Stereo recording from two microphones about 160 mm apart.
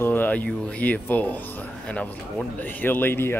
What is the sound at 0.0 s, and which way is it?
Speech, 10° left (ahead or behind).